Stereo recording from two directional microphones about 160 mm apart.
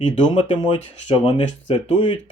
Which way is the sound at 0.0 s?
30° left (ahead or behind).